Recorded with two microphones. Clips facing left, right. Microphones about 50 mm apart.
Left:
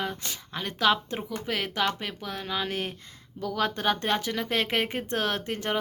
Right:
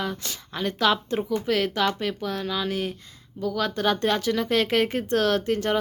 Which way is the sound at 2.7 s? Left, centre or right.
Left.